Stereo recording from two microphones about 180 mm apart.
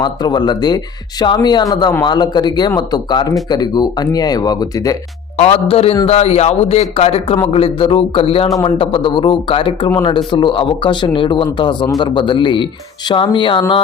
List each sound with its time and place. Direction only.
0.0 s speech: 25° left (ahead or behind)
5.4 s speech: 35° left (ahead or behind)